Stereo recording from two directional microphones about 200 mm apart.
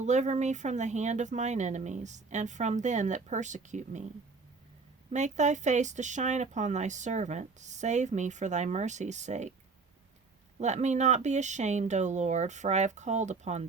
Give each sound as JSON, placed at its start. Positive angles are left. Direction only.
{"t": 0.0, "sound": "speech", "side_deg": -35}
{"t": 5.1, "sound": "speech", "side_deg": -35}
{"t": 10.6, "sound": "speech", "side_deg": -35}